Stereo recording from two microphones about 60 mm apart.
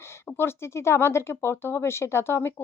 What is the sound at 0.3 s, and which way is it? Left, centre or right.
Speech, left.